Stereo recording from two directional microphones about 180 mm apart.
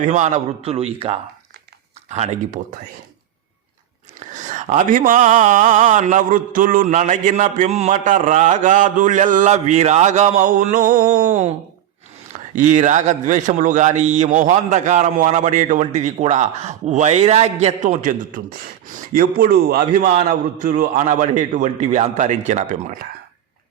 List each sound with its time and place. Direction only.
0.0 s a man's voice: 40° right (ahead or behind)
4.4 s speech: 40° right (ahead or behind)
12.5 s a man's voice: 45° right (ahead or behind); by 20.1 s 60° right (ahead or behind)
20.1 s a man's voice: 45° right (ahead or behind)